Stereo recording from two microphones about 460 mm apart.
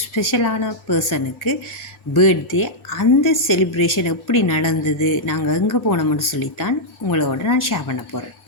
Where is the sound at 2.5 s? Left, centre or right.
Left.